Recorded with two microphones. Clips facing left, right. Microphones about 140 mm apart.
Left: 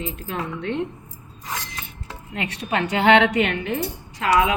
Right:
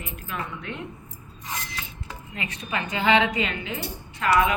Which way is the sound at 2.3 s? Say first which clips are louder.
Left 6 dB; 75° left (ahead or behind).